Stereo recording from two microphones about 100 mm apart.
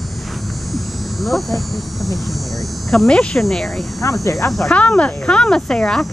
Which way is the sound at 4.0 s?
35° left (ahead or behind).